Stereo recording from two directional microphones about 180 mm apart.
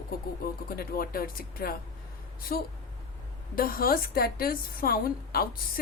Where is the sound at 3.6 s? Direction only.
55° left (ahead or behind).